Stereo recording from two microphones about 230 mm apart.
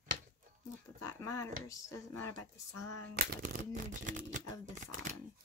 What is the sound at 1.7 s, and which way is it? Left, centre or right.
Speech, centre.